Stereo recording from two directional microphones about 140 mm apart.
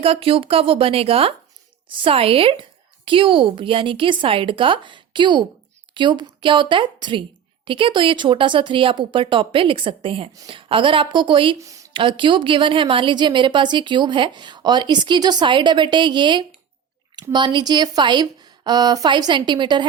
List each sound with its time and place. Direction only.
0.0 s a woman's voice: 40° right (ahead or behind)
11.6 s speech: 25° right (ahead or behind)
11.9 s a woman's voice: 35° right (ahead or behind)